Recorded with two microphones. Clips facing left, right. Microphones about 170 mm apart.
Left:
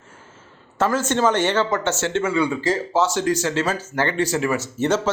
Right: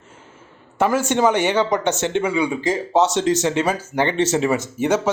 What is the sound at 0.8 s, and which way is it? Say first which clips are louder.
Speech: right 2 dB; 15° right (ahead or behind).